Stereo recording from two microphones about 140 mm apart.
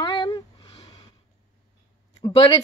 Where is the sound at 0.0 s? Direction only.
35° left (ahead or behind).